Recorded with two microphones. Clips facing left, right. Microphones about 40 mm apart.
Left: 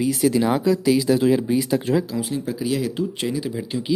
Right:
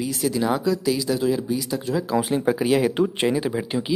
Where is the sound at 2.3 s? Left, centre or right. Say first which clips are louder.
Right 4 dB; right.